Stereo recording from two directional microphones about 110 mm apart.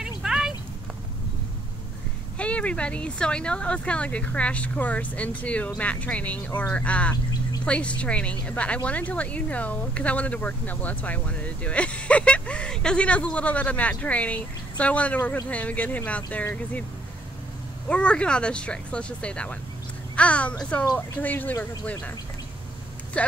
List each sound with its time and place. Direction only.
0.2 s a sound: 5° right (ahead or behind)
2.3 s speech: 10° left (ahead or behind)
17.8 s speech: 10° left (ahead or behind)
23.2 s speech: 10° left (ahead or behind)